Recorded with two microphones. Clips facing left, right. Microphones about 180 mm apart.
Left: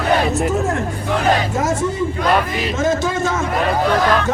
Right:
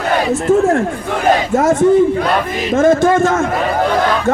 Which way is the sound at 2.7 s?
55° right (ahead or behind).